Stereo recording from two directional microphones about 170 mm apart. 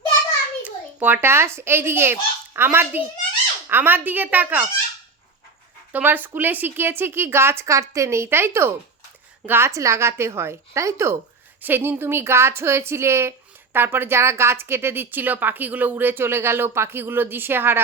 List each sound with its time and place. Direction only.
0.6 s a child's voice: 10° right (ahead or behind)
5.9 s a woman's voice: 10° right (ahead or behind)